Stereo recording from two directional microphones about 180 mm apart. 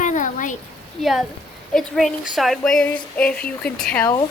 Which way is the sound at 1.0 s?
Centre (ahead or behind).